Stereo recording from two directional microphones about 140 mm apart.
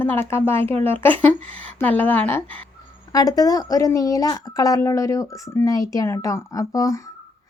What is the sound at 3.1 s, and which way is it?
Speech, 25° left (ahead or behind).